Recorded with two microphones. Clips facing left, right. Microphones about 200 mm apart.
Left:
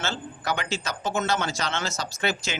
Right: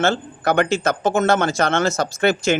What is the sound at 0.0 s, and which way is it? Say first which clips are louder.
Speech: right 11 dB; 55° right (ahead or behind).